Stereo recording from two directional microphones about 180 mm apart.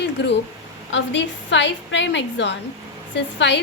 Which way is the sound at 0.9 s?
90° left.